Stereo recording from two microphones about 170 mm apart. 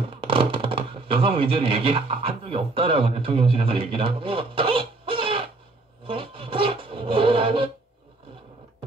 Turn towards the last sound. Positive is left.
turn(degrees=-30)  # may be behind; listen again after turning